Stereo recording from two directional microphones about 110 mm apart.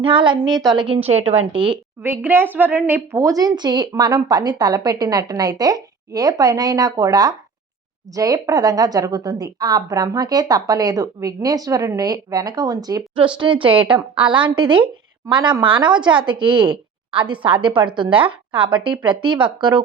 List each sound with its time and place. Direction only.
0.0 s a woman's voice: 50° right (ahead or behind)
2.0 s speech: 20° right (ahead or behind); by 13.0 s 35° right (ahead or behind)
13.1 s a woman's voice: 45° right (ahead or behind)